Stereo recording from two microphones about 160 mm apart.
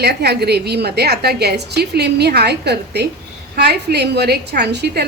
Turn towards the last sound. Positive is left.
turn(degrees=-90)